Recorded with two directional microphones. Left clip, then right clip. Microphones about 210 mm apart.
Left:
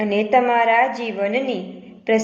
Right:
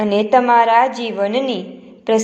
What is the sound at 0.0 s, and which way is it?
A woman's voice, 30° right (ahead or behind).